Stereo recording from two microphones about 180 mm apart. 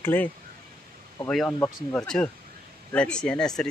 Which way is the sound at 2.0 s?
5° left (ahead or behind).